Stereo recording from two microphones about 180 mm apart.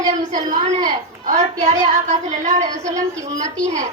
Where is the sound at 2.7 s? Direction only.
20° right (ahead or behind).